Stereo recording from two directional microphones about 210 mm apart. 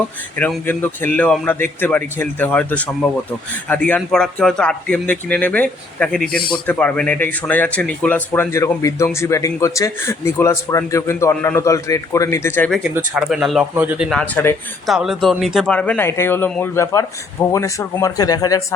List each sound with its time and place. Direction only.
0.3 s a man's voice: 10° left (ahead or behind)
13.1 s a man's voice: 5° right (ahead or behind); by 18.6 s 15° left (ahead or behind)